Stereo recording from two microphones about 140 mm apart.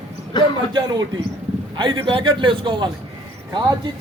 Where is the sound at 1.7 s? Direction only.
35° right (ahead or behind).